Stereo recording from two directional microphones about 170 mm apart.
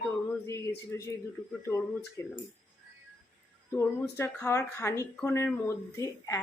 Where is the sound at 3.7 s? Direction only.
15° left (ahead or behind).